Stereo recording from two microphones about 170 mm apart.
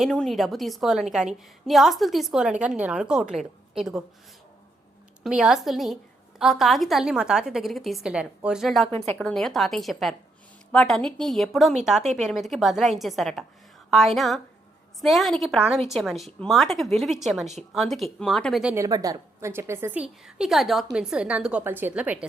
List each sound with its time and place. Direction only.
0.0 s a woman's voice: 5° left (ahead or behind)
5.2 s a woman's voice: 5° right (ahead or behind)
8.9 s speech: 35° right (ahead or behind)
9.1 s a woman's voice: 5° left (ahead or behind)
18.7 s a woman's voice: 20° right (ahead or behind)